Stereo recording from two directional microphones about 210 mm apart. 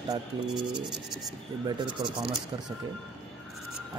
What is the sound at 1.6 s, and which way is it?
Speech, 20° right (ahead or behind).